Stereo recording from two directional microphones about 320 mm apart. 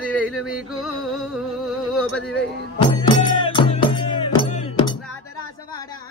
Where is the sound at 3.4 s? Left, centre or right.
Centre.